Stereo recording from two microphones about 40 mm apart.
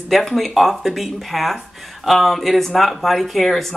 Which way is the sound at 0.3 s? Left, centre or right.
Centre.